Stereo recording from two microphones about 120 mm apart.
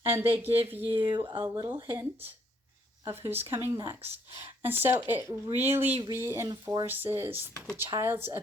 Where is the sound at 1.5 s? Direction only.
25° right (ahead or behind).